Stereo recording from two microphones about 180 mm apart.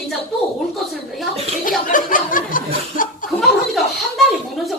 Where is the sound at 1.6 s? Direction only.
50° left (ahead or behind).